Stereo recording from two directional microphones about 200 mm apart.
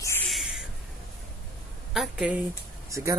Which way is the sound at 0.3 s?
Centre (ahead or behind).